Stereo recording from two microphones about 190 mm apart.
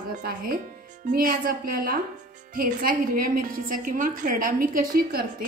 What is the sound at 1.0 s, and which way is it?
A woman's voice, 50° right (ahead or behind).